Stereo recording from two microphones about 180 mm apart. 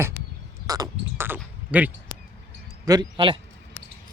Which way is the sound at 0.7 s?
15° right (ahead or behind).